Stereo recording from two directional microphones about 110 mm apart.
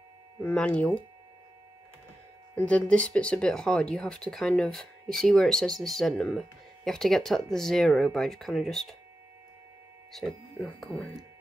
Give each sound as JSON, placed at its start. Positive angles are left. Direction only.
{"t": 0.4, "sound": "speech", "side_deg": 15}
{"t": 2.5, "sound": "speech", "side_deg": 10}
{"t": 10.1, "sound": "speech", "side_deg": 0}